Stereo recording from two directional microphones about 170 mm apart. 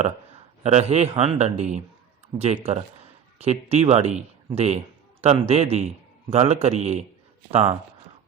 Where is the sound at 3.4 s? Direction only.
40° right (ahead or behind).